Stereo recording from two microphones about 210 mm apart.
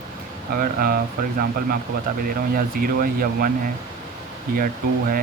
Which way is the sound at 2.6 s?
40° right (ahead or behind).